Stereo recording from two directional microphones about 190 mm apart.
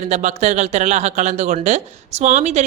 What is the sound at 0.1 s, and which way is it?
Speech, 35° right (ahead or behind).